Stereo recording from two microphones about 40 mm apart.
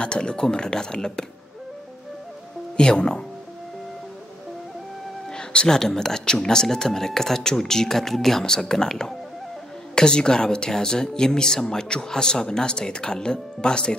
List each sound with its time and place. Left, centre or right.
0.0 s speech: left
2.8 s speech: left
5.3 s music: left
5.7 s speech: centre